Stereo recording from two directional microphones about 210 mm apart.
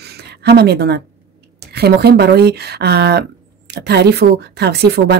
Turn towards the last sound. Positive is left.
turn(degrees=-50)  # may be behind; listen again after turning